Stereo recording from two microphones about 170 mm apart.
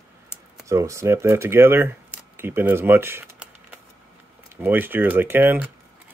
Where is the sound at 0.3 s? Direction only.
5° right (ahead or behind).